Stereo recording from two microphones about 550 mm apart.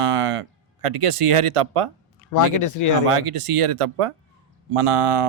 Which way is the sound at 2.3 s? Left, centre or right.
Left.